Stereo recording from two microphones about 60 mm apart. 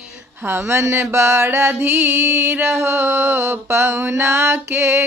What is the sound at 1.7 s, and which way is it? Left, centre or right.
Mantra, right.